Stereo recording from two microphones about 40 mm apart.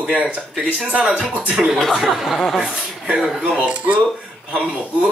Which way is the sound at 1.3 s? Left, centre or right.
Right.